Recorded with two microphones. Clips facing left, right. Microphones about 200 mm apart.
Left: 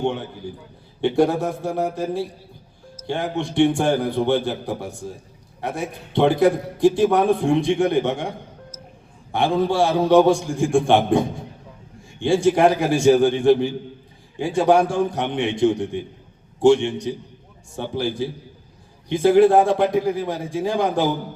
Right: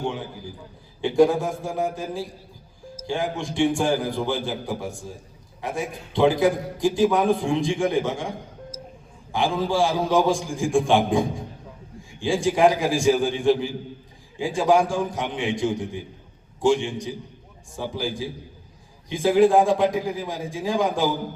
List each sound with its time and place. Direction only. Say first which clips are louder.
0.0 s a man's voice: left 5 dB; 65° left (ahead or behind)
9.3 s a man's voice: left 3 dB; 65° left (ahead or behind)
12.2 s a man's voice: left 3 dB; 65° left (ahead or behind)